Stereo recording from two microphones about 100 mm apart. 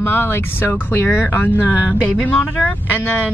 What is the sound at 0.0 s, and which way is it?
Speech, 20° left (ahead or behind).